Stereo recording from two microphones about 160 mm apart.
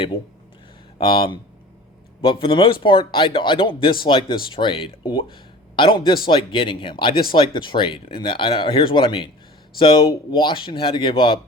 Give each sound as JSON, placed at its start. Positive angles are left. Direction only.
{"t": 0.9, "sound": "speech", "side_deg": 30}